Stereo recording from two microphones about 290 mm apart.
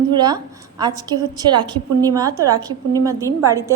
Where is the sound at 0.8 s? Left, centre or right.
Centre.